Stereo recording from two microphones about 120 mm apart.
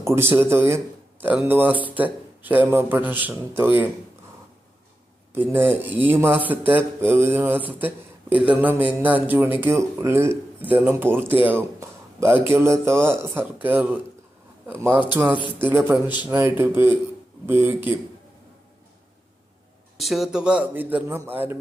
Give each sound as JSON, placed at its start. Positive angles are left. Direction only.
{"t": 0.0, "sound": "speech", "side_deg": -20}
{"t": 5.5, "sound": "speech", "side_deg": -20}
{"t": 20.0, "sound": "speech", "side_deg": 0}